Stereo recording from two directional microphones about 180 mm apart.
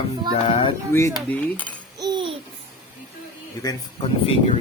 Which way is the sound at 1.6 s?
25° right (ahead or behind).